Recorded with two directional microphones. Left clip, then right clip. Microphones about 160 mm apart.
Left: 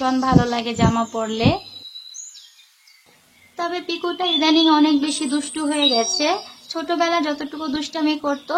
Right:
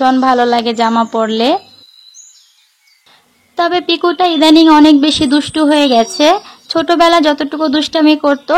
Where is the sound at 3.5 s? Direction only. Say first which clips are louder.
Right 12 dB; 60° right (ahead or behind).